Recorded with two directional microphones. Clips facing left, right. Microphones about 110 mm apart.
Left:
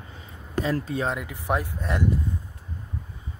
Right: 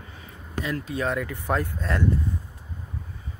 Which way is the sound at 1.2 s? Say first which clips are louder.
Right 1 dB; 15° left (ahead or behind).